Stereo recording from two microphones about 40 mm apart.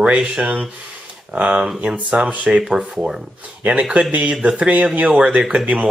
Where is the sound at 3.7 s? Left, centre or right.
Right.